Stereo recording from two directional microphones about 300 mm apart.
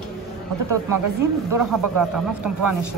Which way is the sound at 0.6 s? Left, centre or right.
Right.